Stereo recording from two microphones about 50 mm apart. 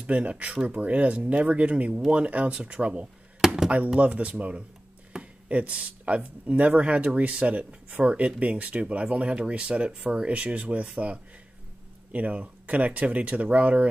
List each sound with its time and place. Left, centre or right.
0.0 s speech: right
3.3 s a sound: centre
3.9 s speech: right